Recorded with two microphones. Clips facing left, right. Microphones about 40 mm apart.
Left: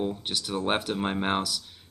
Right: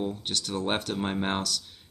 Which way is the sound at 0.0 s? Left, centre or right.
Centre.